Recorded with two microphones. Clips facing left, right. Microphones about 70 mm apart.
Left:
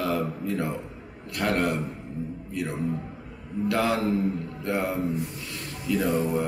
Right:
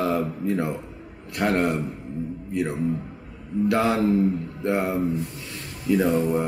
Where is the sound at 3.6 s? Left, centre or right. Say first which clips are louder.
Right 3 dB; right.